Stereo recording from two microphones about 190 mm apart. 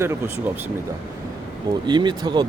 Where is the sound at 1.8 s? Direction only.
25° right (ahead or behind).